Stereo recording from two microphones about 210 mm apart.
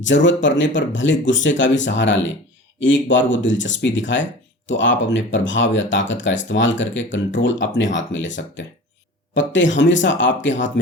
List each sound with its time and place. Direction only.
0.0 s speech: 60° left (ahead or behind)